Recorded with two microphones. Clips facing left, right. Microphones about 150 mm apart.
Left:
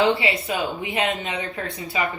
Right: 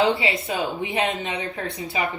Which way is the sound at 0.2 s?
25° right (ahead or behind).